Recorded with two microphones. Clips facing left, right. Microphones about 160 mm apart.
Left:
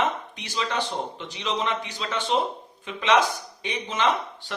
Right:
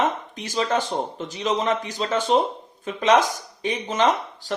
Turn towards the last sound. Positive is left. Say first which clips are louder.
# right 3 dB
turn(degrees=-40)  # may be behind; listen again after turning